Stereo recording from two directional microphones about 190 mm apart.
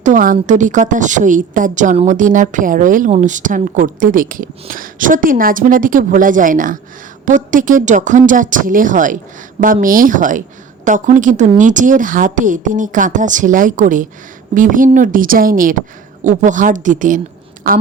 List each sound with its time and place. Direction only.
0.0 s a woman's voice: 45° right (ahead or behind)